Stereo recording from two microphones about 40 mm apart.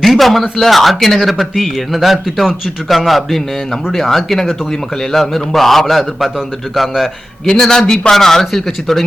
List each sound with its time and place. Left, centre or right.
0.0 s a man's voice: centre
7.4 s speech: centre
8.1 s speech: centre